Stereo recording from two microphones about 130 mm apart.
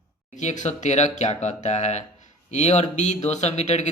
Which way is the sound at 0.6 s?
65° left (ahead or behind).